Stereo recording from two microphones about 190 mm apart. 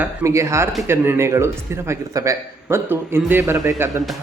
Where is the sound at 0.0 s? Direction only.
15° right (ahead or behind).